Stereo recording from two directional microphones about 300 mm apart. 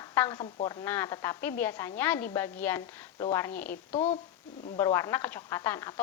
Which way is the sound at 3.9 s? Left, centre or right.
Left.